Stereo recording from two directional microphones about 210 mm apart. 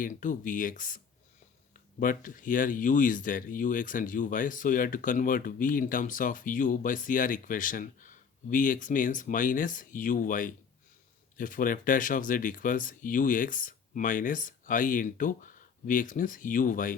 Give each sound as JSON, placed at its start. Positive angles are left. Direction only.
{"t": 0.0, "sound": "speech", "side_deg": 40}